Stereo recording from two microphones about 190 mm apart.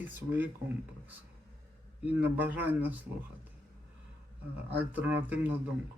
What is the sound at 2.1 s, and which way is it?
Speech, 10° right (ahead or behind).